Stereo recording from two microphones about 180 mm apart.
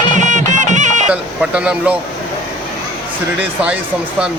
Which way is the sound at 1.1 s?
5° right (ahead or behind).